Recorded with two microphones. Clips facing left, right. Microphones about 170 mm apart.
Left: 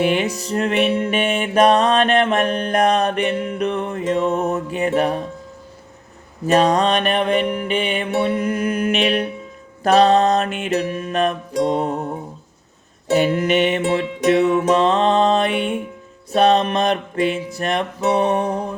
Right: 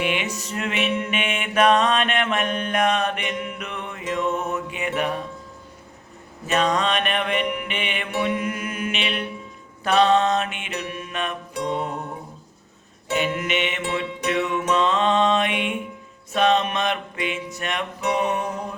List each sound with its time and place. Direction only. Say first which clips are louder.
0.0 s music: left 7 dB; 40° left (ahead or behind)
6.5 s music: left 6 dB; 35° left (ahead or behind)